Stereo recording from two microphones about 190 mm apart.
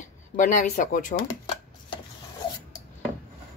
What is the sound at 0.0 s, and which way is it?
Speech, 40° left (ahead or behind).